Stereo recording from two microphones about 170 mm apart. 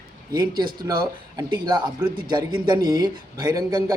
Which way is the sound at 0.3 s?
25° right (ahead or behind).